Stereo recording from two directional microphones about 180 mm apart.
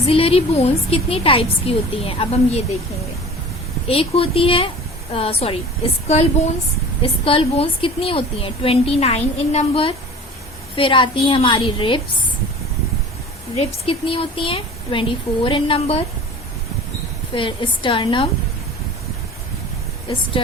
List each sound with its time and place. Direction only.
0.1 s a woman's voice: 30° left (ahead or behind)
3.8 s a woman's voice: 30° left (ahead or behind)
13.6 s a woman's voice: 35° left (ahead or behind)
17.3 s a woman's voice: 30° left (ahead or behind)